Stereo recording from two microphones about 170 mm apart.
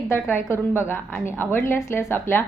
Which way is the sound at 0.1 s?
15° left (ahead or behind).